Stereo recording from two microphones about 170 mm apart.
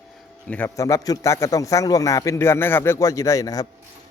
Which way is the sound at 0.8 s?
20° left (ahead or behind).